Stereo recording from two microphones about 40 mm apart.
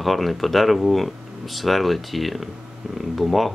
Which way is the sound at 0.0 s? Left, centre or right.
Centre.